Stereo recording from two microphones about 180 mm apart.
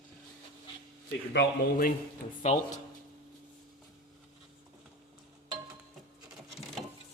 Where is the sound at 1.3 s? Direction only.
75° left (ahead or behind).